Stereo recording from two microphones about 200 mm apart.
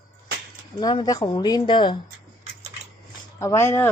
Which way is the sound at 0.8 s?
20° left (ahead or behind).